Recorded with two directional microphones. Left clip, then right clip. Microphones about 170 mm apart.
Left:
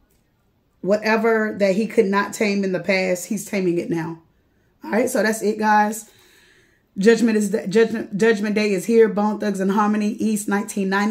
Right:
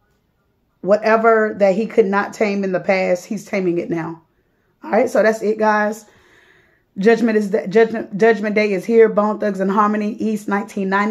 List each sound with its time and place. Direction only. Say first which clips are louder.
0.8 s speech: right 5 dB; 25° left (ahead or behind)